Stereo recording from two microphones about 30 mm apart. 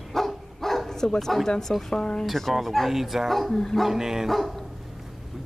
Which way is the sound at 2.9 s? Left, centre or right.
Centre.